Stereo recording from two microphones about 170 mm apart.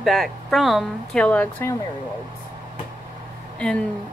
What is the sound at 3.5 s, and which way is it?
Speech, 5° left (ahead or behind).